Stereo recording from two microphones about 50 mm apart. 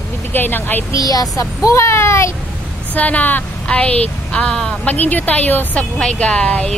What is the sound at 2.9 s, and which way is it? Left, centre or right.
A woman's voice, left.